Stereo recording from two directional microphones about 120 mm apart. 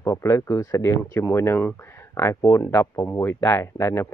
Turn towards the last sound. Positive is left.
turn(degrees=20)  # may be behind; listen again after turning